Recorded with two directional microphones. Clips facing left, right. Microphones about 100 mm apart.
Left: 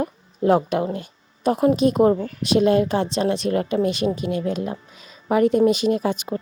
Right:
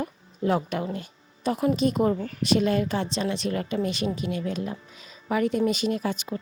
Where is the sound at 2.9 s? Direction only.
55° left (ahead or behind).